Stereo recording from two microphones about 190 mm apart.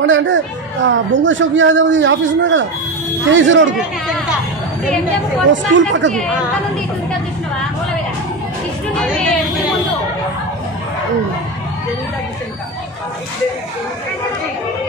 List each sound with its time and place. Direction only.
0.0 s a man's voice: 80° right
5.5 s speech: 75° right (ahead or behind)